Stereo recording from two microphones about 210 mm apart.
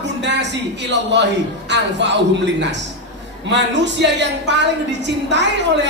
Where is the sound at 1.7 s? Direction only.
55° right (ahead or behind).